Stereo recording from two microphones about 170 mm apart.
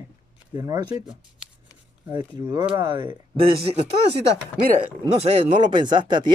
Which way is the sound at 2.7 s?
25° right (ahead or behind).